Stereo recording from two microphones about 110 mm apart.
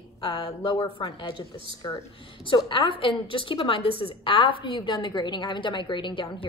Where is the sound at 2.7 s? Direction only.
50° left (ahead or behind).